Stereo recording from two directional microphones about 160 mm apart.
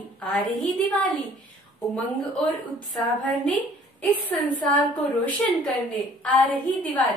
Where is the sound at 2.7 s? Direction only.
5° left (ahead or behind).